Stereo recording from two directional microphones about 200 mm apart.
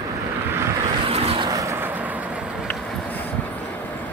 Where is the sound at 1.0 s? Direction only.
30° right (ahead or behind); by 2.1 s 10° right (ahead or behind).